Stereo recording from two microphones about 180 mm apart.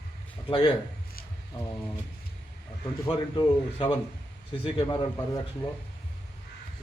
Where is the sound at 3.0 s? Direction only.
25° left (ahead or behind).